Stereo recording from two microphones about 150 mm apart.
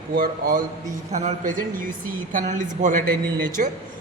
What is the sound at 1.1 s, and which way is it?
A woman's voice, 55° right (ahead or behind).